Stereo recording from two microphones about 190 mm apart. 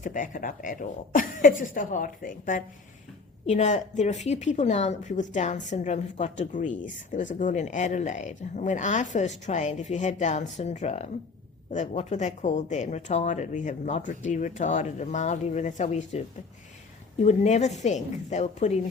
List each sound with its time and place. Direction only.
0.0 s a woman's voice: 45° left (ahead or behind)
17.2 s speech: 35° left (ahead or behind)